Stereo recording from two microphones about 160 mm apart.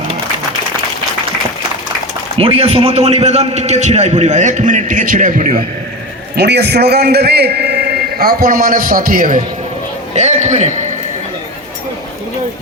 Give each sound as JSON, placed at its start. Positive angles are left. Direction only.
{"t": 2.4, "sound": "a man's voice", "side_deg": -40}
{"t": 6.3, "sound": "a man's voice", "side_deg": -90}
{"t": 10.2, "sound": "a man's voice", "side_deg": -45}